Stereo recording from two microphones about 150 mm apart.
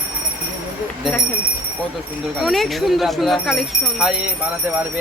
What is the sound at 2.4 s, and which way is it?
Speech, centre (ahead or behind).